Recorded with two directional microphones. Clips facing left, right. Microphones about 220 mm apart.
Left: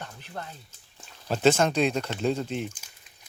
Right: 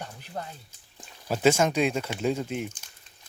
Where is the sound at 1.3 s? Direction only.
10° right (ahead or behind).